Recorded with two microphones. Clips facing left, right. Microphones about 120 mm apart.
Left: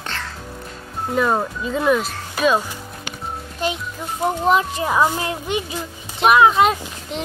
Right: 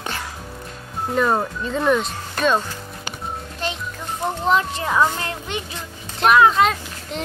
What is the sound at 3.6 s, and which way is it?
Speech, 15° left (ahead or behind).